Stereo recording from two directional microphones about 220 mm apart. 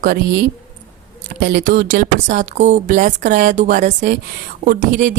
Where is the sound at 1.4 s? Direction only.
40° right (ahead or behind).